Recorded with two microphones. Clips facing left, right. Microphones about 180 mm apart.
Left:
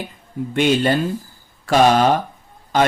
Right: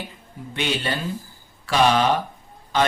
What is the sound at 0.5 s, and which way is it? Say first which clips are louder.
A man's voice: left 9 dB; 45° left (ahead or behind).